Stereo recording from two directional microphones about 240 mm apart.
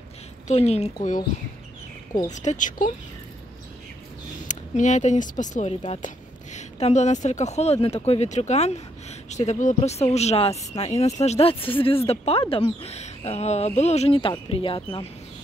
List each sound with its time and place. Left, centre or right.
0.5 s speech: left
2.2 s speech: left
4.5 s speech: left